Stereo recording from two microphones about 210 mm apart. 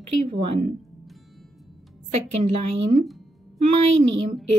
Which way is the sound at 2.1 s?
30° right (ahead or behind).